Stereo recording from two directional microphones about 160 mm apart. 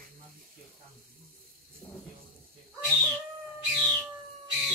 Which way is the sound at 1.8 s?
5° left (ahead or behind).